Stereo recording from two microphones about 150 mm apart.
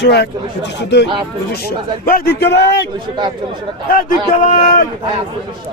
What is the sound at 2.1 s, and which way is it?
Speech, 90° left.